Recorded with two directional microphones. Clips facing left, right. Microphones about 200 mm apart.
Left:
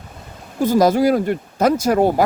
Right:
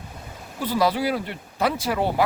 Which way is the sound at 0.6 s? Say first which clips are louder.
Left 8 dB; 45° left (ahead or behind).